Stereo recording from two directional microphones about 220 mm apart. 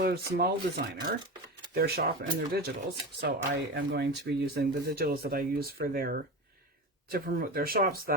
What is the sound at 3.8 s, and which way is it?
Speech, 50° right (ahead or behind).